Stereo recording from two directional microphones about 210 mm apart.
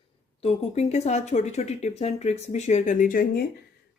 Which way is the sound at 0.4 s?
30° left (ahead or behind).